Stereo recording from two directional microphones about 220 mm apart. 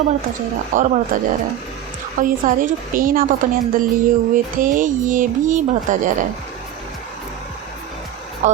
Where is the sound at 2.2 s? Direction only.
35° right (ahead or behind).